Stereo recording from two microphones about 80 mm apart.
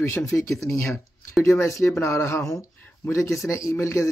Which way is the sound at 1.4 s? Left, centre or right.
Left.